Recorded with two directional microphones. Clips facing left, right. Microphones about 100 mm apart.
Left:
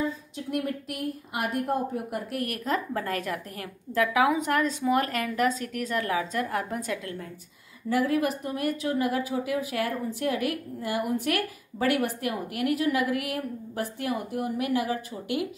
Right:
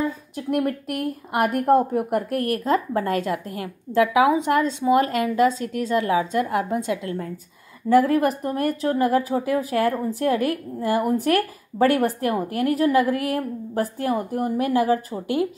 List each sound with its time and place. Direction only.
0.4 s a woman's voice: 50° right (ahead or behind)
2.4 s a woman's voice: 30° right (ahead or behind)
7.9 s speech: 45° right (ahead or behind)